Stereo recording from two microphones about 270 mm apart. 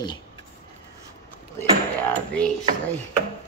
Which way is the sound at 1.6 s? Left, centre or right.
Centre.